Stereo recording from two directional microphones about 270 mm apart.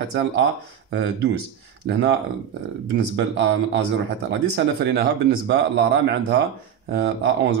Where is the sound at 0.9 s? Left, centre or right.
Right.